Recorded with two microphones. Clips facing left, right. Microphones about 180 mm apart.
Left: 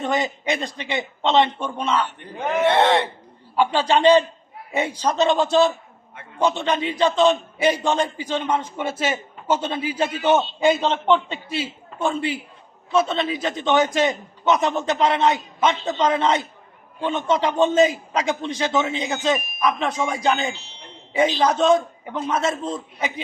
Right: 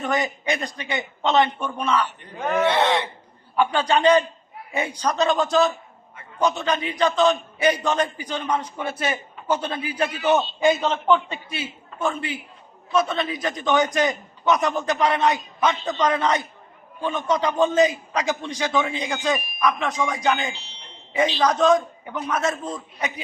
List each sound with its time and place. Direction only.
0.0 s a man's voice: 25° left (ahead or behind)
2.6 s a sound: 55° left (ahead or behind)
3.5 s a man's voice: 30° left (ahead or behind)
20.5 s speech: 45° left (ahead or behind)
21.1 s a man's voice: 25° left (ahead or behind)